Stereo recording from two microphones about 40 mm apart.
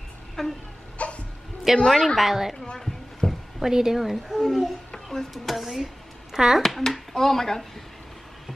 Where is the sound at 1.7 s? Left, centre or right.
Centre.